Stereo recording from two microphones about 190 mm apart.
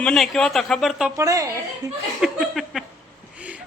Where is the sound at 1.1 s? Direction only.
20° right (ahead or behind).